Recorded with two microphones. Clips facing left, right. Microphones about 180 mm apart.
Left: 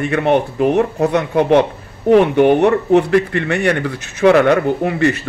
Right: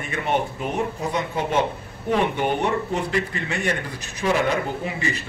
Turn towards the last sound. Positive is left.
turn(degrees=65)  # may be behind; listen again after turning